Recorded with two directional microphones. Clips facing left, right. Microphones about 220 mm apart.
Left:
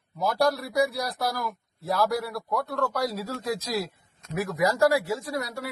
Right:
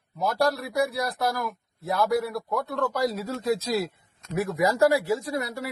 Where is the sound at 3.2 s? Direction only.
25° right (ahead or behind).